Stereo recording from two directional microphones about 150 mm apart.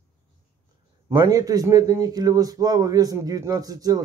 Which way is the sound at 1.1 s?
20° right (ahead or behind).